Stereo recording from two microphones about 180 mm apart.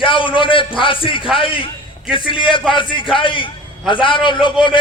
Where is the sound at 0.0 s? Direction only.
30° left (ahead or behind).